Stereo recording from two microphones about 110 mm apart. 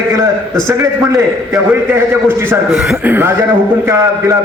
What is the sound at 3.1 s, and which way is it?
Speech, 20° right (ahead or behind).